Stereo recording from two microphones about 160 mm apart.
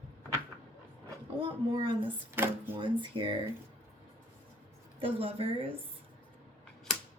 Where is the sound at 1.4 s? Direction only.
35° right (ahead or behind).